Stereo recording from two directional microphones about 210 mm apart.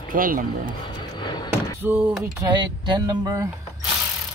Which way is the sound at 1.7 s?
10° right (ahead or behind).